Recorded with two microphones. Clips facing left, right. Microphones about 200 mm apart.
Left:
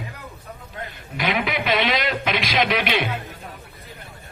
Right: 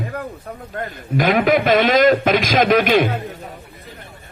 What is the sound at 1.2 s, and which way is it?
Speech, 45° right (ahead or behind).